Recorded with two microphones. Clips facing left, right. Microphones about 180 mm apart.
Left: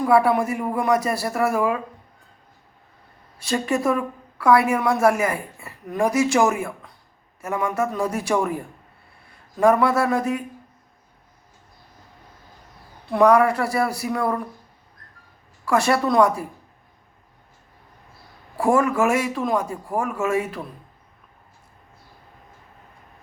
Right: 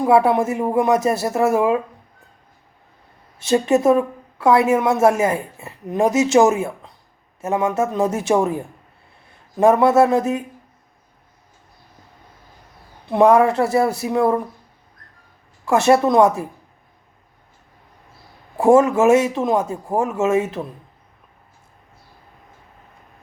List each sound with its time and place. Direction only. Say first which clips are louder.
0.0 s a woman's voice: right 3 dB; 25° right (ahead or behind)
3.3 s a woman's voice: right 7 dB; 25° right (ahead or behind)
13.1 s a woman's voice: right 3 dB; 25° right (ahead or behind)
15.6 s a woman's voice: right 5 dB; 25° right (ahead or behind)
18.5 s a woman's voice: right 6 dB; 20° right (ahead or behind)